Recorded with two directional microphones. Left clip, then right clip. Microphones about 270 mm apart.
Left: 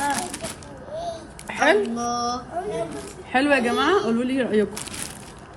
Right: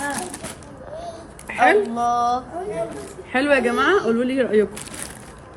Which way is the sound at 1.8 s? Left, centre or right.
Centre.